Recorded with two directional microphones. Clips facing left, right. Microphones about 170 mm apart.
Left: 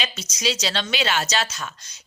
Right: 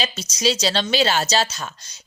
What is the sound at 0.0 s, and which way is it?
A woman's voice, 35° right (ahead or behind).